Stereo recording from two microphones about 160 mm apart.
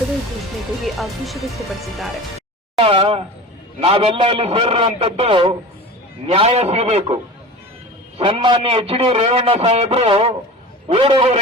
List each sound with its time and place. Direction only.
0.9 s speech: centre (ahead or behind)
2.7 s a man's voice: 35° right (ahead or behind)
8.2 s a man's voice: 35° right (ahead or behind)